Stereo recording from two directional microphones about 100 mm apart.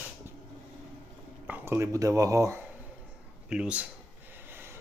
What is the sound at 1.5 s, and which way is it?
Speech, 25° right (ahead or behind).